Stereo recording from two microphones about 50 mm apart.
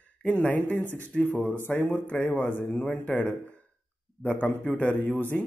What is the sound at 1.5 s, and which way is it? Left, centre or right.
Speech, left.